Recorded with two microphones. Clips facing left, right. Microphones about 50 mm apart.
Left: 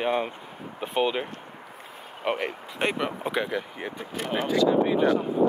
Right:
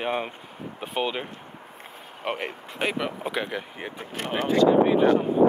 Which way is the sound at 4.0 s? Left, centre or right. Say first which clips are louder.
Right 1 dB; right.